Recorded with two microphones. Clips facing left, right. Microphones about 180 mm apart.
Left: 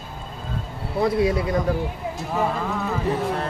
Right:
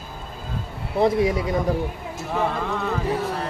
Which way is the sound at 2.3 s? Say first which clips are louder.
Even; 5° left (ahead or behind).